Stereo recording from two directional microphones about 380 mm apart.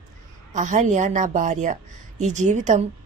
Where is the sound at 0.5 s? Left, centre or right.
Centre.